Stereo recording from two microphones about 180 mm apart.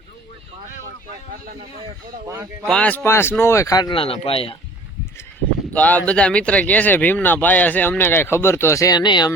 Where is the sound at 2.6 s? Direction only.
5° left (ahead or behind); by 4.6 s 30° left (ahead or behind).